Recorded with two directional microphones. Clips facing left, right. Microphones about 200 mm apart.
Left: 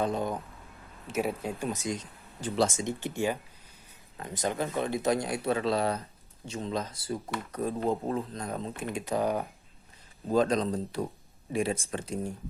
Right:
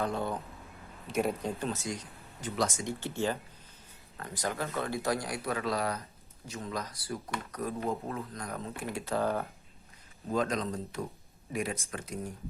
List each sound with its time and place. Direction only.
0.0 s speech: 15° left (ahead or behind)
1.0 s speech: 5° left (ahead or behind)
10.2 s speech: 30° left (ahead or behind)